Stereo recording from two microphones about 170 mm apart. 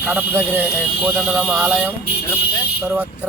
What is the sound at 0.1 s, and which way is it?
Speech, 10° right (ahead or behind).